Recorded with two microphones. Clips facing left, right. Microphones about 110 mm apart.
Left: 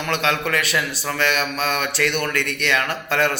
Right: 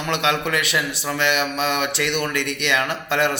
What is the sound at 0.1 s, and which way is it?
A man's voice, 20° right (ahead or behind).